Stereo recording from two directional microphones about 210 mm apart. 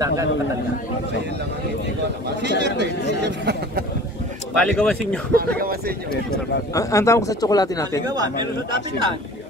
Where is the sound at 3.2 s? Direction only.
55° right (ahead or behind).